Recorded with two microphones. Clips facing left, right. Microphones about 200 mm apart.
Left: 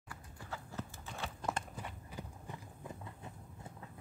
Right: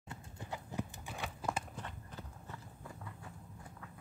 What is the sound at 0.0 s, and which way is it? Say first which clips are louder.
Clip-clop: right 3 dB; 25° right (ahead or behind).